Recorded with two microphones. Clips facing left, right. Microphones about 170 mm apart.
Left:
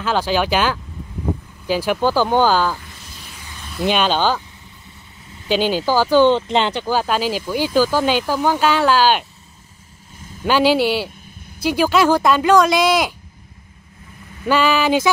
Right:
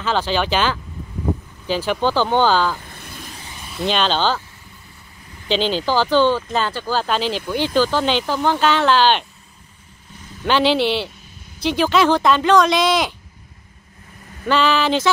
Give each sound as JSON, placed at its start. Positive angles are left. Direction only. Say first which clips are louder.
{"t": 0.0, "sound": "speech", "louder": "left 1 dB", "side_deg": 10}
{"t": 2.9, "sound": "vehicle", "louder": "right 4 dB", "side_deg": -55}
{"t": 3.8, "sound": "speech", "louder": "left 2 dB", "side_deg": 10}
{"t": 5.5, "sound": "speech", "louder": "left 2 dB", "side_deg": 10}
{"t": 6.3, "sound": "speech", "louder": "left 4 dB", "side_deg": 20}
{"t": 10.4, "sound": "speech", "louder": "left 2 dB", "side_deg": 10}
{"t": 14.4, "sound": "speech", "louder": "left 1 dB", "side_deg": 10}